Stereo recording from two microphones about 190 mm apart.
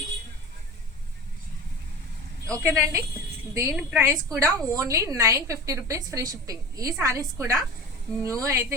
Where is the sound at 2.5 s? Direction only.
15° right (ahead or behind).